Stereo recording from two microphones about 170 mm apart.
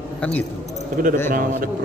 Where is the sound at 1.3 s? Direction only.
55° right (ahead or behind).